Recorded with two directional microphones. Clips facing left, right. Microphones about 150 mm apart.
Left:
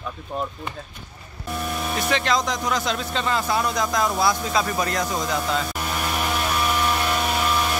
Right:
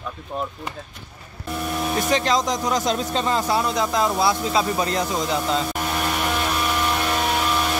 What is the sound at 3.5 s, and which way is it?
Speech, 25° right (ahead or behind).